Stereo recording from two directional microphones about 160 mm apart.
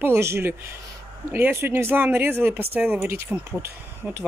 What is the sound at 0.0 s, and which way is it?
Speech, 15° right (ahead or behind).